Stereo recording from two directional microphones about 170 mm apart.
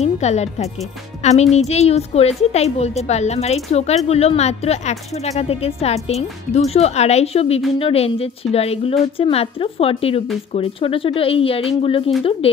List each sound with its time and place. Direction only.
0.0 s a woman's voice: 40° left (ahead or behind)